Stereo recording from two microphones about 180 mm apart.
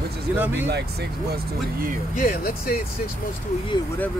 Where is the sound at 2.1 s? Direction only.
50° left (ahead or behind).